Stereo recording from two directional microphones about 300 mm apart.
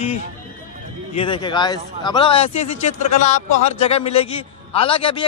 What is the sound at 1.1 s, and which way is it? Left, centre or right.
A man's voice, centre.